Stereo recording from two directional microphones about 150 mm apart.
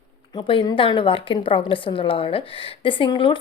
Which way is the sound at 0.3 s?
35° left (ahead or behind).